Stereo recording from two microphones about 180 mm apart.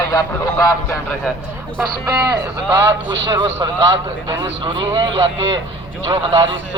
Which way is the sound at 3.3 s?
25° right (ahead or behind).